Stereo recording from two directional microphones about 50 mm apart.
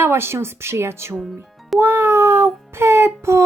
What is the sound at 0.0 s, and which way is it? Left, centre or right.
Speech, right.